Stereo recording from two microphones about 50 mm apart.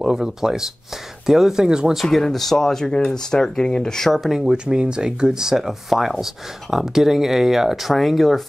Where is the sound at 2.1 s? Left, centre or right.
Centre.